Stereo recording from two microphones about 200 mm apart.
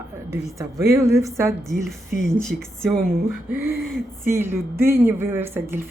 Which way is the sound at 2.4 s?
Centre (ahead or behind).